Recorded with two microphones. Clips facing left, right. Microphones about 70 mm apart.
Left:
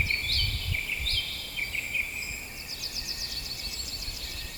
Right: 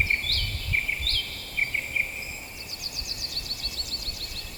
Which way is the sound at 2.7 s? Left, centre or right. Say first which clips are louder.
Right 1 dB; right.